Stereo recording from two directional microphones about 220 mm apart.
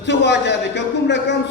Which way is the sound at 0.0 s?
50° left (ahead or behind).